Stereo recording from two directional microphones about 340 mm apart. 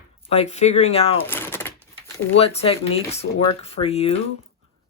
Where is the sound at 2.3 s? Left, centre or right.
Centre.